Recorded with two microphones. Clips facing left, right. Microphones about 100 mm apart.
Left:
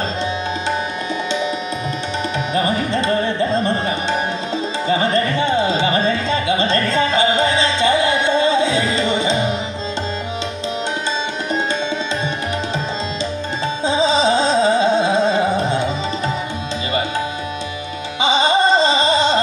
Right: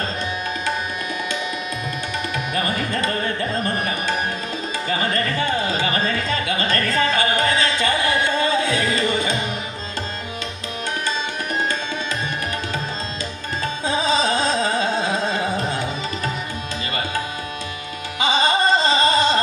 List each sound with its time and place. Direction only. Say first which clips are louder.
2.5 s carnatic music: left 6 dB; 25° left (ahead or behind)
4.8 s music: left 5 dB; 25° left (ahead or behind)
13.8 s music: left 5 dB; 25° left (ahead or behind)
18.2 s music: left 3 dB; 20° left (ahead or behind)